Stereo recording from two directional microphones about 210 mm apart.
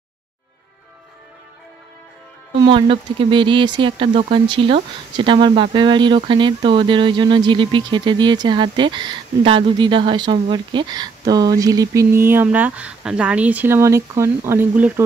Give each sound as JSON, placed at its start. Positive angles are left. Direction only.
{"t": 2.6, "sound": "speech", "side_deg": -25}